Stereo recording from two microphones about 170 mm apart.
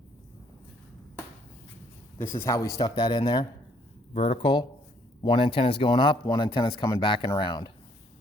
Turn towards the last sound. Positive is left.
turn(degrees=25)  # may be behind; listen again after turning